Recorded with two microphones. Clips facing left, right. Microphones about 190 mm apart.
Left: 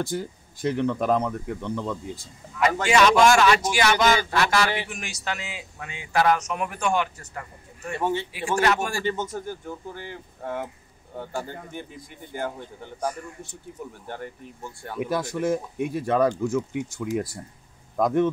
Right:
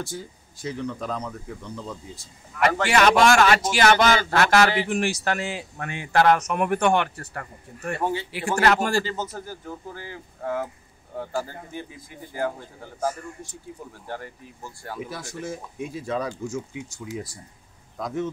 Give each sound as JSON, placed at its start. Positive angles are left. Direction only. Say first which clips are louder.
{"t": 0.1, "sound": "speech", "louder": "left 6 dB", "side_deg": 60}
{"t": 2.5, "sound": "a man's voice", "louder": "even", "side_deg": -55}
{"t": 9.3, "sound": "speech", "louder": "left 4 dB", "side_deg": -40}
{"t": 15.0, "sound": "speech", "louder": "left 10 dB", "side_deg": 60}
{"t": 17.9, "sound": "speech", "louder": "left 8 dB", "side_deg": 60}